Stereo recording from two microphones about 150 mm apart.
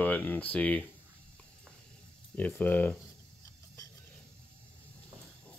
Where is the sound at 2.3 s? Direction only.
10° left (ahead or behind).